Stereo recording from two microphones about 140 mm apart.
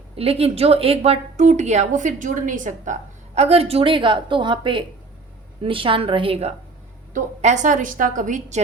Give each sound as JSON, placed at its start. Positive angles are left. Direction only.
{"t": 0.2, "sound": "a woman's voice", "side_deg": -45}
{"t": 7.1, "sound": "a woman's voice", "side_deg": -60}